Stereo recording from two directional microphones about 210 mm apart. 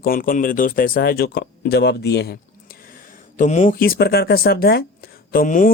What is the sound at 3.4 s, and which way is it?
Speech, 35° left (ahead or behind).